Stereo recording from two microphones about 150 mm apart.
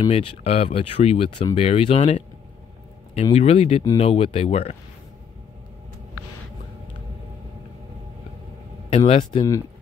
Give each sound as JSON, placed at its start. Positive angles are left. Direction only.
{"t": 0.1, "sound": "speech", "side_deg": 40}
{"t": 8.9, "sound": "speech", "side_deg": 40}